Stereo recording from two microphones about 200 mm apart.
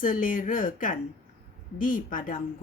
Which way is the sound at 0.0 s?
40° left (ahead or behind).